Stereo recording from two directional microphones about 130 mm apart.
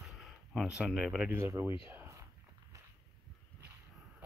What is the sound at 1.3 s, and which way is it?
Speech, 20° right (ahead or behind).